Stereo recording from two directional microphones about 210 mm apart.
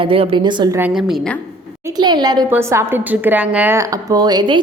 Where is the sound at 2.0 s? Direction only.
20° right (ahead or behind).